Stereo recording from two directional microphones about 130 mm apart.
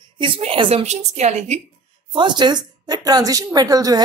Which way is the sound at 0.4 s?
45° right (ahead or behind).